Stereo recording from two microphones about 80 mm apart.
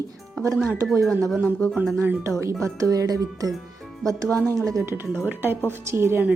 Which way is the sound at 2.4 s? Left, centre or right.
Right.